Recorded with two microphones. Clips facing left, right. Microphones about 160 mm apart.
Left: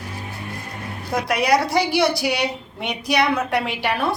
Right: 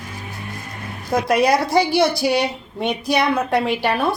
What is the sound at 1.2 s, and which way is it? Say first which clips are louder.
A woman's voice: right 2 dB; 25° right (ahead or behind).